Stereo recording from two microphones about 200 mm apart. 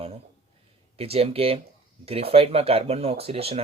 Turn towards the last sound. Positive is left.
turn(degrees=-30)  # may be behind; listen again after turning